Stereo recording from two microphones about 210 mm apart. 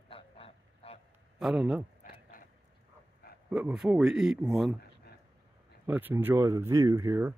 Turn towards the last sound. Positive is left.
turn(degrees=-10)  # may be behind; listen again after turning